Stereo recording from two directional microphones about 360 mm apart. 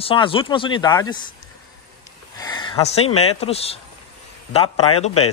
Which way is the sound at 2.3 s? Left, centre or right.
Centre.